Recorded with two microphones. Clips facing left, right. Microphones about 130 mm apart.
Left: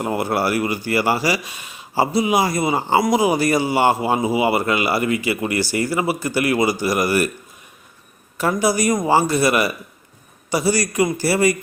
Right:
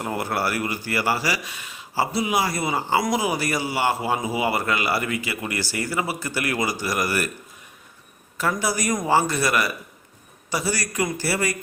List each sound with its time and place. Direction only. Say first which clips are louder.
0.0 s speech: left 5 dB; 20° left (ahead or behind)
8.4 s speech: left 6 dB; 15° left (ahead or behind)